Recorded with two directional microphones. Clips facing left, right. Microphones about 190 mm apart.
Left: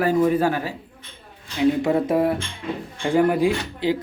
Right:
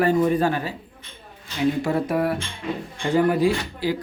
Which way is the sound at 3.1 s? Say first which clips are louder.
Left 1 dB; 15° left (ahead or behind).